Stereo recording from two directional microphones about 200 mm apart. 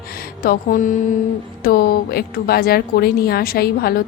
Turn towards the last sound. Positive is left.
turn(degrees=50)  # may be behind; listen again after turning